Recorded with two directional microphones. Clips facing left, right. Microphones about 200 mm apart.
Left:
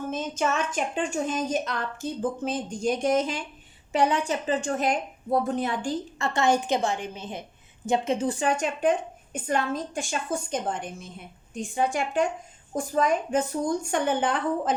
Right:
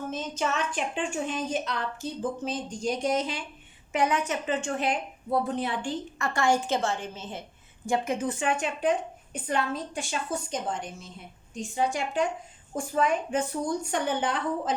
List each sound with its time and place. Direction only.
0.1 s a woman's voice: 50° left (ahead or behind)
3.9 s a woman's voice: 30° left (ahead or behind)
6.1 s a woman's voice: 25° left (ahead or behind); by 12.2 s 50° left (ahead or behind)
12.7 s a woman's voice: 40° left (ahead or behind)